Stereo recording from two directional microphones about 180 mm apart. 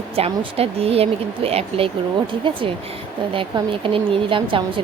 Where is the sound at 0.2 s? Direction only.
35° right (ahead or behind).